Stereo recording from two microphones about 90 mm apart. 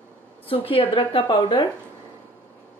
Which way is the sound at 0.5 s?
85° left.